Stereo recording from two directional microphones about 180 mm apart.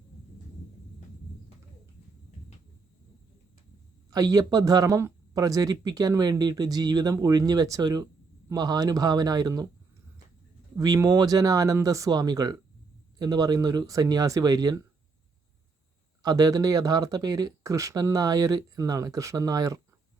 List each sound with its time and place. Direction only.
4.1 s speech: 20° right (ahead or behind)
10.8 s speech: 20° right (ahead or behind)
16.2 s speech: 20° right (ahead or behind)